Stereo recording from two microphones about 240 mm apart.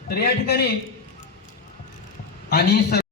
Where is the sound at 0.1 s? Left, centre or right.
Left.